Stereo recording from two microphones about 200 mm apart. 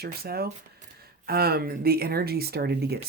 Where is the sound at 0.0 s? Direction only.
50° right (ahead or behind).